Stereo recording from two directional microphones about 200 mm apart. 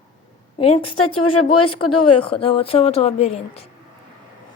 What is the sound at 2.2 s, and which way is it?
A woman's voice, 25° left (ahead or behind).